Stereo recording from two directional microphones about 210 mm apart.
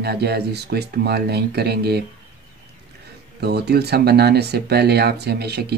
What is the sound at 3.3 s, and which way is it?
Speech, 50° right (ahead or behind).